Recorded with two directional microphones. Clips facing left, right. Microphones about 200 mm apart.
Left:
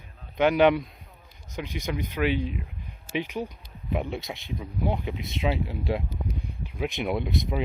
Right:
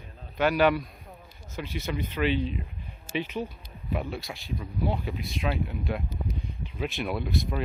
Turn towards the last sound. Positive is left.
turn(degrees=20)  # may be behind; listen again after turning